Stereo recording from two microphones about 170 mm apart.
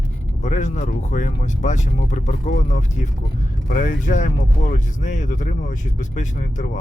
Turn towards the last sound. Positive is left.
turn(degrees=45)  # may be behind; listen again after turning